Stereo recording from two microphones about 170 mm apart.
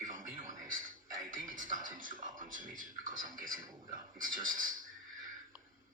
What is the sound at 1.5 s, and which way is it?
Speech, 50° right (ahead or behind).